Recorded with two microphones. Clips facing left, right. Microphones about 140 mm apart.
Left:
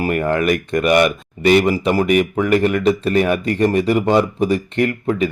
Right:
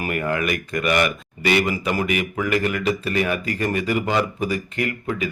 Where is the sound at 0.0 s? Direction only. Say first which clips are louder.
Left 6 dB; 30° left (ahead or behind).